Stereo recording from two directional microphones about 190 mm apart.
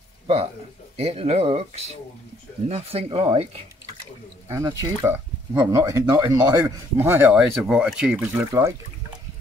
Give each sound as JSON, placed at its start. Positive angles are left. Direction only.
{"t": 0.9, "sound": "speech", "side_deg": -30}
{"t": 4.5, "sound": "speech", "side_deg": -15}